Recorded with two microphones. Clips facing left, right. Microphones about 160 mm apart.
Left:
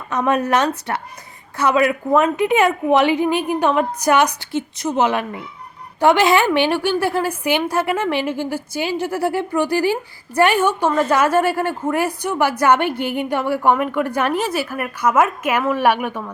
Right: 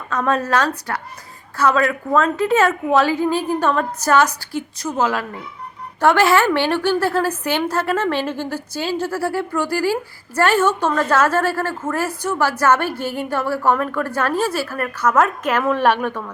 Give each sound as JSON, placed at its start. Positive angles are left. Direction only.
{"t": 0.1, "sound": "a woman's voice", "side_deg": 20}